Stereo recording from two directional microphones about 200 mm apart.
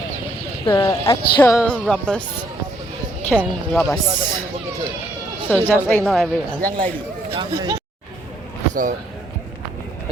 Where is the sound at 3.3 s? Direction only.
Centre (ahead or behind).